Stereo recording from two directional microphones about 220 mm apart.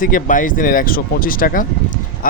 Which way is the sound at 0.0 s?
35° left (ahead or behind).